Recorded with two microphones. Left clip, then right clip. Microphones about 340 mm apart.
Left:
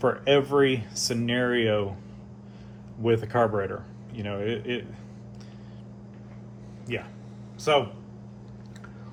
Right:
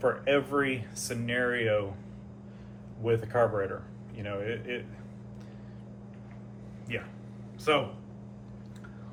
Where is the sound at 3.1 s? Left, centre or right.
Left.